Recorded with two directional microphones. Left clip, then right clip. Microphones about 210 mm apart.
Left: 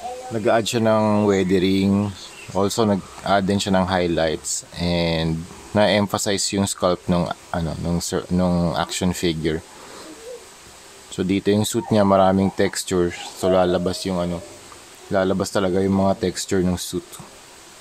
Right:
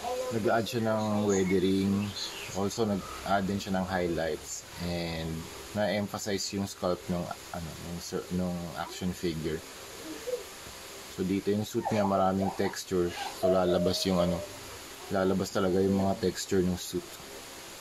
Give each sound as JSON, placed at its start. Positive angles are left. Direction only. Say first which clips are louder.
{"t": 0.5, "sound": "speech", "louder": "left 12 dB", "side_deg": 40}
{"t": 11.3, "sound": "speech", "louder": "left 11 dB", "side_deg": 40}
{"t": 15.1, "sound": "speech", "louder": "left 9 dB", "side_deg": 35}